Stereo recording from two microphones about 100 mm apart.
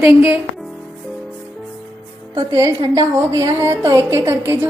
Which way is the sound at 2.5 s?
35° right (ahead or behind).